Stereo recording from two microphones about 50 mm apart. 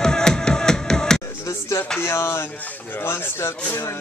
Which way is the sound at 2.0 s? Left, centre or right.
Left.